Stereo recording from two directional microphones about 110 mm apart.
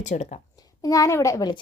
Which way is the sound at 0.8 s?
30° left (ahead or behind).